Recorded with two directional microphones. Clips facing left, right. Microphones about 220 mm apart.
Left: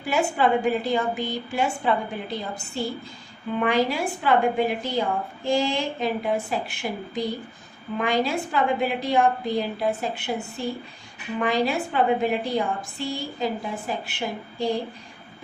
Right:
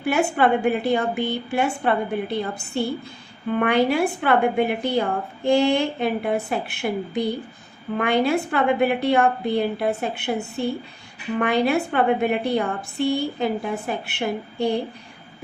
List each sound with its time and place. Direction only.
0.0 s a woman's voice: 60° right (ahead or behind)